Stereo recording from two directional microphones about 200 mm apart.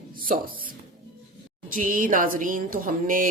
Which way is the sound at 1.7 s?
45° right (ahead or behind).